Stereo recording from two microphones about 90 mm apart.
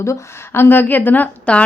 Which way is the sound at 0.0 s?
30° left (ahead or behind).